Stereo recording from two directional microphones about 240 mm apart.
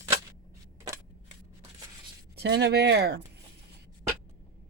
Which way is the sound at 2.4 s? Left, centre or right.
Right.